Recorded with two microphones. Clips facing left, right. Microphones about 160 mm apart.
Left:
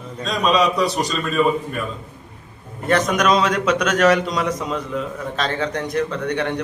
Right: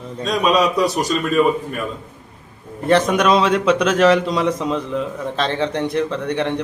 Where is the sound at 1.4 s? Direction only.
15° right (ahead or behind).